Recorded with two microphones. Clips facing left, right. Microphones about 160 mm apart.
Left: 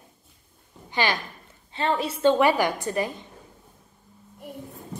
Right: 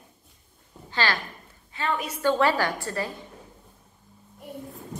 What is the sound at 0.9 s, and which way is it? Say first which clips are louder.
Speech: left 2 dB; 15° left (ahead or behind).